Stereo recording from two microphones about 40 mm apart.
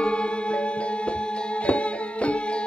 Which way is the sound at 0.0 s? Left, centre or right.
Left.